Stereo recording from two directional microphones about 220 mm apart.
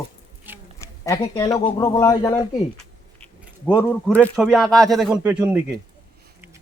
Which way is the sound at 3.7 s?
5° left (ahead or behind).